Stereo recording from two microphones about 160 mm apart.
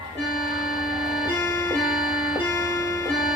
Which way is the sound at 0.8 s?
5° right (ahead or behind).